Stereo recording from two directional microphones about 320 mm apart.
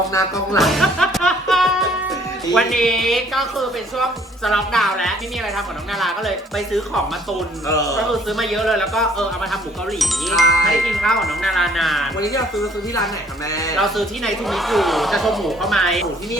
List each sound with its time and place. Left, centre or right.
0.1 s speech: centre
7.7 s speech: centre
7.9 s speech: centre
13.5 s speech: centre
13.7 s speech: centre